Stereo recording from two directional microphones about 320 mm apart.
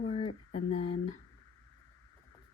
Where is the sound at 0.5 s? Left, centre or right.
Centre.